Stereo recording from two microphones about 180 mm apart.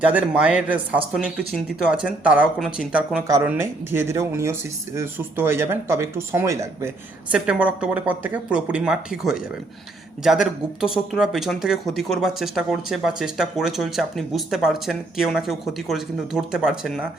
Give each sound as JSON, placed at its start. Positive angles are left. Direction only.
{"t": 0.1, "sound": "speech", "side_deg": -5}